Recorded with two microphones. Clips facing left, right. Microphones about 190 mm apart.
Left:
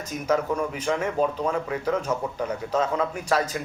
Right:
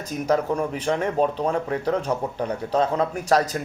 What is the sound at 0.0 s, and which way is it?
Speech, 35° right (ahead or behind).